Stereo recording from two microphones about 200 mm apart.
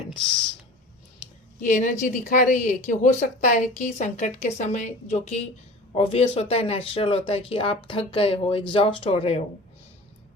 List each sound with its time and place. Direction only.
1.6 s speech: 40° left (ahead or behind)